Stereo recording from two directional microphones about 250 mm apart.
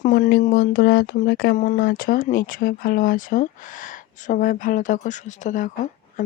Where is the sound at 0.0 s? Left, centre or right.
Left.